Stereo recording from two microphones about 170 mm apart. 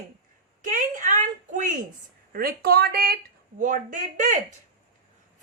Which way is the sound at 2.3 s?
60° right (ahead or behind).